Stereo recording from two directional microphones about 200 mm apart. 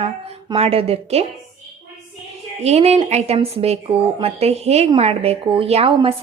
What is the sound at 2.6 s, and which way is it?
A woman's voice, 30° right (ahead or behind).